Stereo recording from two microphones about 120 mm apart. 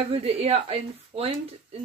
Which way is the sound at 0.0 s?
55° right (ahead or behind).